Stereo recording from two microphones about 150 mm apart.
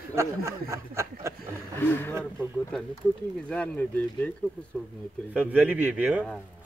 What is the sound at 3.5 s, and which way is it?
Speech, 10° left (ahead or behind).